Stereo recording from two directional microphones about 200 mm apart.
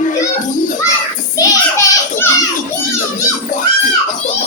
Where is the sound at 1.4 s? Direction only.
15° left (ahead or behind).